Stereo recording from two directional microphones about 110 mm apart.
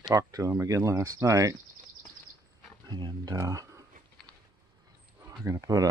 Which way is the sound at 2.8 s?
40° right (ahead or behind).